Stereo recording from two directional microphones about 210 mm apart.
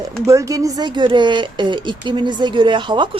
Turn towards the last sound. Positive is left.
turn(degrees=-20)  # may be behind; listen again after turning